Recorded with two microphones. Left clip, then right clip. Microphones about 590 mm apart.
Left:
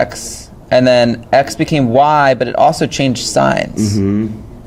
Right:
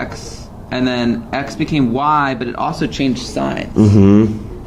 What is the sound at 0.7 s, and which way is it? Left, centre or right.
Speech, left.